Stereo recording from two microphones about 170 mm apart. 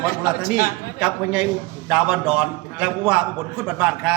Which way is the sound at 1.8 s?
5° right (ahead or behind).